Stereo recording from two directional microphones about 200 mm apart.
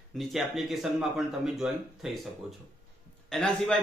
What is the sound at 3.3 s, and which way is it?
Speech, 5° left (ahead or behind).